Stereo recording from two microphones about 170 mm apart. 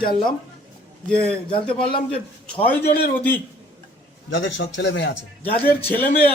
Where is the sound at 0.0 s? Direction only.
30° left (ahead or behind).